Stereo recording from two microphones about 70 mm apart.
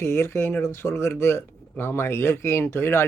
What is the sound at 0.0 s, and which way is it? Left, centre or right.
Speech, left.